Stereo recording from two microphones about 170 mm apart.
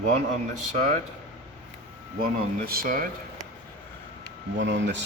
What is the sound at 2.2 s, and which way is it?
Speech, 60° right (ahead or behind).